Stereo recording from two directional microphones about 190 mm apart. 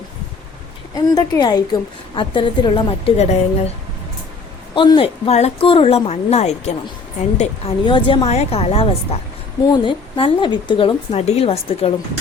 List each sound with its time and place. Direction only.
0.9 s speech: 20° left (ahead or behind)
4.7 s a woman's voice: 25° left (ahead or behind)
7.9 s a woman's voice: 25° left (ahead or behind)